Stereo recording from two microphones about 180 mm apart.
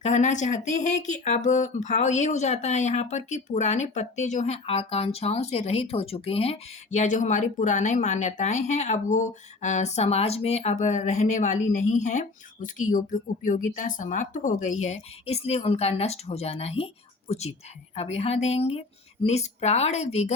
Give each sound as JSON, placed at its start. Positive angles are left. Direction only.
{"t": 0.0, "sound": "speech", "side_deg": 40}